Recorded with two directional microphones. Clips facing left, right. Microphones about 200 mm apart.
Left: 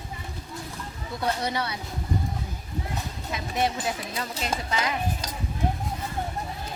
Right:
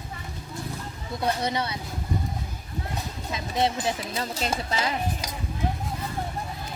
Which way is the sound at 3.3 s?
25° right (ahead or behind).